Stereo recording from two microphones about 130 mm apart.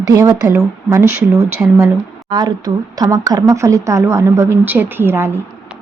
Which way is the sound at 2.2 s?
35° right (ahead or behind).